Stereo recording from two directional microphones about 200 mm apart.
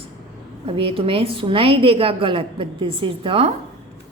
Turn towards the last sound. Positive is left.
turn(degrees=-30)  # may be behind; listen again after turning